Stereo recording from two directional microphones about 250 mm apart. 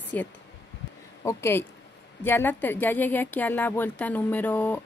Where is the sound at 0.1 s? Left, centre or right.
Centre.